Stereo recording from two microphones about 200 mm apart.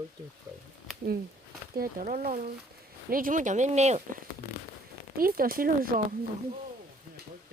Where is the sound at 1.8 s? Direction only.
45° right (ahead or behind).